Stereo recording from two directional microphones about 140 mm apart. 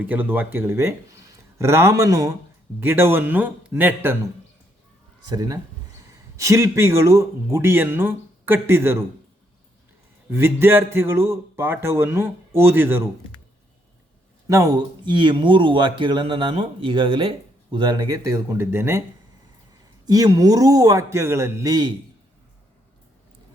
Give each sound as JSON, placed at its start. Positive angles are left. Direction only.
{"t": 0.0, "sound": "a man's voice", "side_deg": -15}
{"t": 5.3, "sound": "a man's voice", "side_deg": -30}
{"t": 10.2, "sound": "speech", "side_deg": -15}
{"t": 14.4, "sound": "speech", "side_deg": -25}
{"t": 20.1, "sound": "a man's voice", "side_deg": -25}